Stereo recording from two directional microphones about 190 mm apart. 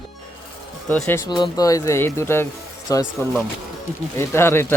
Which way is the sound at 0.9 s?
10° left (ahead or behind).